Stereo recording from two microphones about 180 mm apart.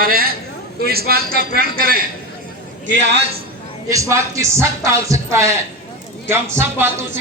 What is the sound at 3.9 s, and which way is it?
A woman's voice, 15° right (ahead or behind).